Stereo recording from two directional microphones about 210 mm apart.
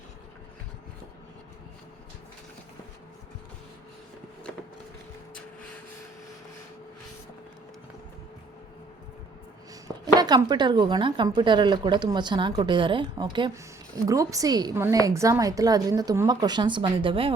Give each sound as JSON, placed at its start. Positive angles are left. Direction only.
{"t": 10.2, "sound": "speech", "side_deg": -20}